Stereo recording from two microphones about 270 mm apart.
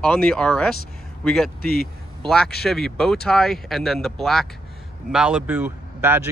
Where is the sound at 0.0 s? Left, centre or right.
Centre.